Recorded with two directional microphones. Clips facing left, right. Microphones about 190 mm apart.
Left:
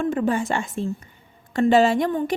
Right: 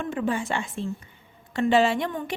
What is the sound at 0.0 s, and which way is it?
A woman's voice, 40° left (ahead or behind).